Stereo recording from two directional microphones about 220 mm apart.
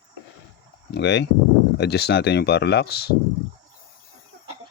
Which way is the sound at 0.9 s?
50° left (ahead or behind).